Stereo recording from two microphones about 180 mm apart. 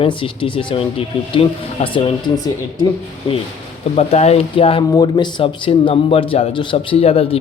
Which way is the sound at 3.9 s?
35° left (ahead or behind).